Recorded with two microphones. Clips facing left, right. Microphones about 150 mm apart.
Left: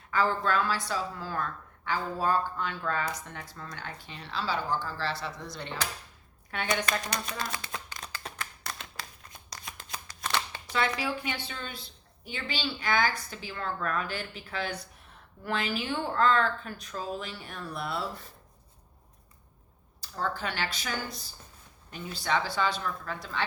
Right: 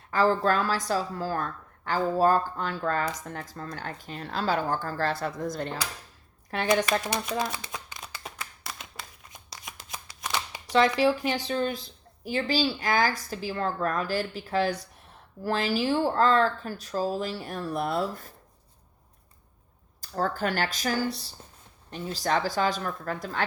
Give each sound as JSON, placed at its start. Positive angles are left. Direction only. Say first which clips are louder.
{"t": 0.1, "sound": "a woman's voice", "louder": "right 4 dB", "side_deg": -40}
{"t": 7.3, "sound": "speech", "louder": "right 6 dB", "side_deg": -5}
{"t": 7.6, "sound": "a sound", "louder": "right 1 dB", "side_deg": -10}
{"t": 9.5, "sound": "shuffling cards", "louder": "even", "side_deg": -15}
{"t": 10.2, "sound": "a sound", "louder": "even", "side_deg": -15}
{"t": 11.2, "sound": "speech", "louder": "right 10 dB", "side_deg": -40}
{"t": 20.0, "sound": "a woman's voice", "louder": "right 5 dB", "side_deg": -45}